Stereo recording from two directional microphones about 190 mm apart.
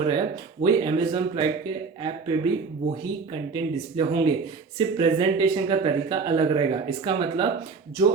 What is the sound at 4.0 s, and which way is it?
Speech, 25° right (ahead or behind).